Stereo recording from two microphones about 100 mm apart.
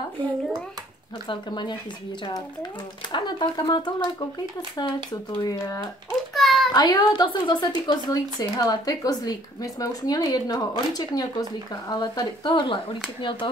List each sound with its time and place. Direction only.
1.2 s speech: 50° left (ahead or behind)
3.1 s speech: 50° left (ahead or behind)
6.3 s a sound: centre (ahead or behind)
6.7 s speech: 40° left (ahead or behind)